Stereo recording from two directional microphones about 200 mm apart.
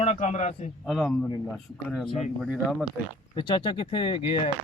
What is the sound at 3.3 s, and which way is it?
Speech, 20° left (ahead or behind).